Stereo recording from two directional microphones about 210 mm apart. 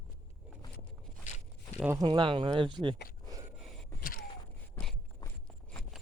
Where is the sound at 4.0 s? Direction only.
40° left (ahead or behind).